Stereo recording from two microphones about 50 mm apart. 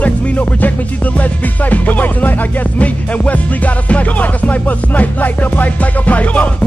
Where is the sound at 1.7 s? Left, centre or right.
Left.